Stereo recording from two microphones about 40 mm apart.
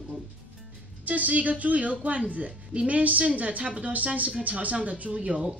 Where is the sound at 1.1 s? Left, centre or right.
Right.